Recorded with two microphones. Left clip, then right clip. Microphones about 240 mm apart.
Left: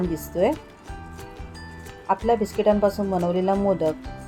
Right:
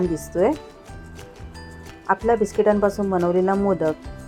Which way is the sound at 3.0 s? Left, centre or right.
Centre.